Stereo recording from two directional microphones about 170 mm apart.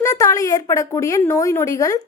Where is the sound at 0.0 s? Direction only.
20° left (ahead or behind).